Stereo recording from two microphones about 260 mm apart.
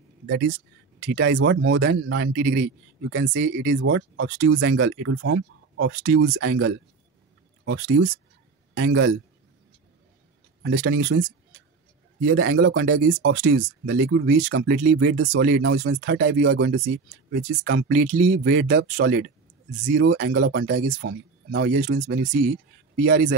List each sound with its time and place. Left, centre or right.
0.3 s speech: right
10.6 s speech: right
12.3 s speech: right